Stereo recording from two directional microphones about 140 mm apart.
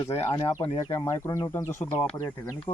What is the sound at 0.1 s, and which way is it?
Speech, 20° left (ahead or behind).